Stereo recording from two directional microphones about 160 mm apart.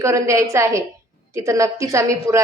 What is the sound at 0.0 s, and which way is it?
A woman's voice, 20° right (ahead or behind).